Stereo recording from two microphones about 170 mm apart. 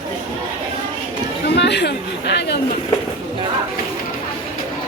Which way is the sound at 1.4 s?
80° left.